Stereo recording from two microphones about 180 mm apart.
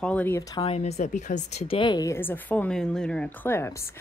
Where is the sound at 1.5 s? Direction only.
30° left (ahead or behind); by 3.7 s 10° left (ahead or behind).